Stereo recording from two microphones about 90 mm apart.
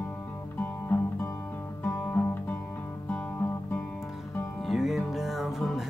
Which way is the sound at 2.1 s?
25° left (ahead or behind).